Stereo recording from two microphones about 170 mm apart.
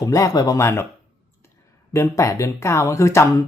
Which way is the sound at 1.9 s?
15° left (ahead or behind).